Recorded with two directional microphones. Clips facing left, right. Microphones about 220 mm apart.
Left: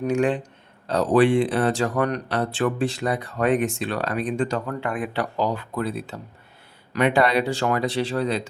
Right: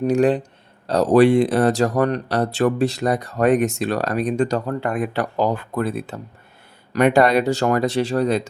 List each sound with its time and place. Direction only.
0.0 s speech: 35° right (ahead or behind)